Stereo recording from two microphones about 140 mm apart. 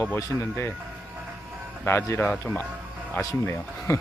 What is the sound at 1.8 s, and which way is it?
A man's voice, 15° left (ahead or behind).